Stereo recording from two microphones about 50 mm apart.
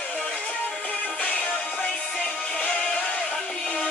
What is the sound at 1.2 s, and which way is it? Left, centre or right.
Music, left.